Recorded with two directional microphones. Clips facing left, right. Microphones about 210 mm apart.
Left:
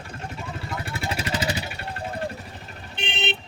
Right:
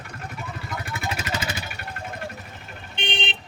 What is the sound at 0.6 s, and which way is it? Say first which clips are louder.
Vehicle: left 1 dB; 30° left (ahead or behind).